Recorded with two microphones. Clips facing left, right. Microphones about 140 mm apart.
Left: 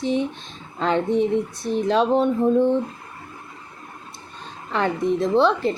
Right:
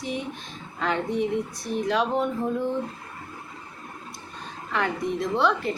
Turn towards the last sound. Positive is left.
turn(degrees=30)  # may be behind; listen again after turning